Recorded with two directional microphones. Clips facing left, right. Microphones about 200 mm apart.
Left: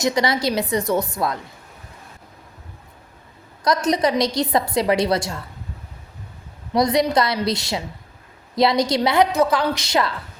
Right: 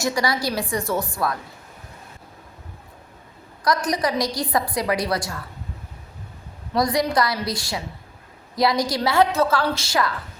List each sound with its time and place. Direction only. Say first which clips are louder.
0.0 s a woman's voice: left 3 dB; 20° left (ahead or behind)
3.6 s a woman's voice: left 3 dB; 25° left (ahead or behind)
6.7 s a woman's voice: left 3 dB; 20° left (ahead or behind)